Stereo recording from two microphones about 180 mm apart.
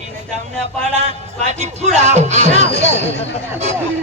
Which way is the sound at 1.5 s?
40° right (ahead or behind).